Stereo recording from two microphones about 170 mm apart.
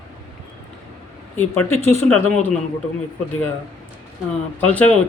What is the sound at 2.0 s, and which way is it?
Speech, 10° left (ahead or behind).